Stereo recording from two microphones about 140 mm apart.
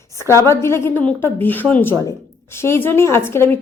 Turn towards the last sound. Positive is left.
turn(degrees=15)  # may be behind; listen again after turning